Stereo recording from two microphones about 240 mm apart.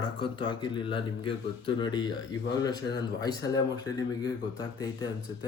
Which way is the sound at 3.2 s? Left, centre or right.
Centre.